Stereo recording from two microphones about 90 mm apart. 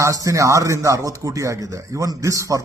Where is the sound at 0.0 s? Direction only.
40° right (ahead or behind).